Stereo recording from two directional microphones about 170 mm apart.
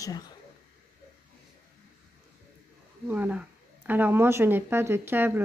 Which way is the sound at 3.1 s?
10° right (ahead or behind).